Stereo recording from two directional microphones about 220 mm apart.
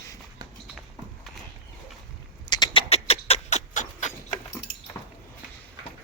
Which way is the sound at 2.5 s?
20° left (ahead or behind).